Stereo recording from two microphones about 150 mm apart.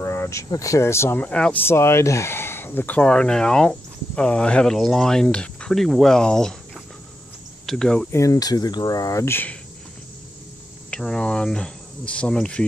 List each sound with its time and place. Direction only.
0.0 s speech: 15° left (ahead or behind)
8.1 s speech: 20° left (ahead or behind)
10.9 s speech: 5° left (ahead or behind)